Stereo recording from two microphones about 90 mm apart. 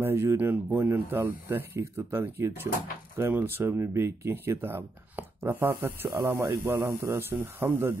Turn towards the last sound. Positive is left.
turn(degrees=-25)  # may be behind; listen again after turning